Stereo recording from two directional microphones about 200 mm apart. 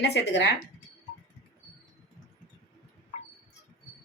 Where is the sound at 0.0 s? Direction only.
60° left (ahead or behind).